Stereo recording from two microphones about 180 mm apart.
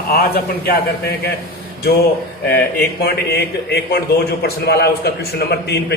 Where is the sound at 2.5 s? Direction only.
65° left (ahead or behind).